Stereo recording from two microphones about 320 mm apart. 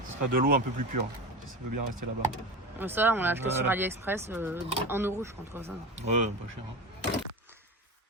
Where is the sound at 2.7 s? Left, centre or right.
Centre.